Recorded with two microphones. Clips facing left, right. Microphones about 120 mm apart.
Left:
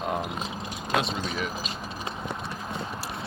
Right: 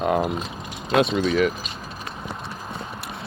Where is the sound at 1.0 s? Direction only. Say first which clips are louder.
Right 14 dB; 65° right (ahead or behind).